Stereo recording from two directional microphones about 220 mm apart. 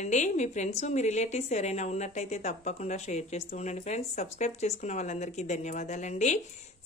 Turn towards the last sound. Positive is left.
turn(degrees=35)  # may be behind; listen again after turning